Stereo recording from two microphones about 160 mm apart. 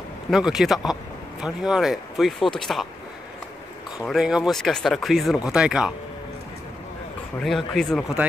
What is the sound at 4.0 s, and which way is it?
Speech, 5° right (ahead or behind).